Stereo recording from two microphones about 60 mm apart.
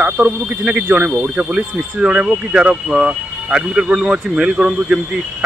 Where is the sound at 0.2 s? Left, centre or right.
Centre.